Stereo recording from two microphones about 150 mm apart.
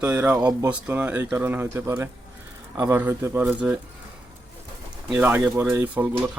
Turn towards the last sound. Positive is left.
turn(degrees=-10)  # may be behind; listen again after turning